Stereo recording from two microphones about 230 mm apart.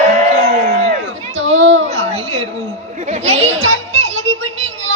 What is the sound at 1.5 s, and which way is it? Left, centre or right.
Children playing, right.